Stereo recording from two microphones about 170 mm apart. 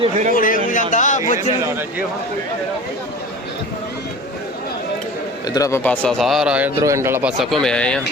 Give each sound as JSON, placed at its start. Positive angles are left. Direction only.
{"t": 0.0, "sound": "speech", "side_deg": -45}
{"t": 0.3, "sound": "speech", "side_deg": 55}
{"t": 5.5, "sound": "speech", "side_deg": 20}
{"t": 6.8, "sound": "speech", "side_deg": -15}